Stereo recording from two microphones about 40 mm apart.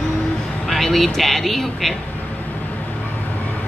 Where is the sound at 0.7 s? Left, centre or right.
Centre.